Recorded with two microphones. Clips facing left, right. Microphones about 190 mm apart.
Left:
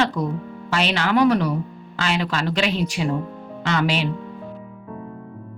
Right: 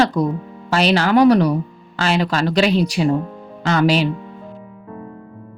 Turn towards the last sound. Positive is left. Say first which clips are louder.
# right 6 dB
turn(degrees=-40)  # may be behind; listen again after turning